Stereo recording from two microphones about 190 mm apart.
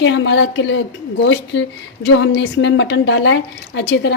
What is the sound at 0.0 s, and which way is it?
Speech, 75° left (ahead or behind).